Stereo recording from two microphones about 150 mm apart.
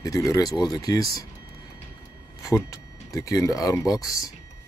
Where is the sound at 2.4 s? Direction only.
20° left (ahead or behind).